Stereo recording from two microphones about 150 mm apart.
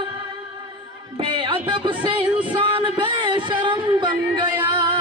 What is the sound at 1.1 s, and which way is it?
Music, 35° right (ahead or behind).